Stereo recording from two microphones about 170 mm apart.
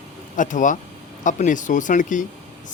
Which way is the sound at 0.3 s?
50° left (ahead or behind).